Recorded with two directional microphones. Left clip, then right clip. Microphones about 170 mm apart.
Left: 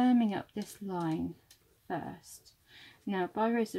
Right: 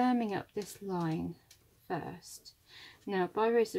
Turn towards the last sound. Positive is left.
turn(degrees=20)  # may be behind; listen again after turning